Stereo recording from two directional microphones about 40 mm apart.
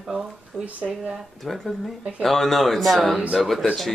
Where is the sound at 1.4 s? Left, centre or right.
Centre.